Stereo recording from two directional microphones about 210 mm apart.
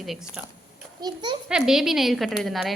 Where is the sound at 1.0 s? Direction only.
20° right (ahead or behind).